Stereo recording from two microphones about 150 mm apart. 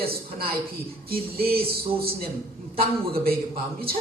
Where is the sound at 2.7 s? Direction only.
85° right.